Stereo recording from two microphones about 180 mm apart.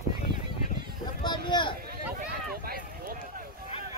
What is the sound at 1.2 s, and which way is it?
Speech, 25° left (ahead or behind).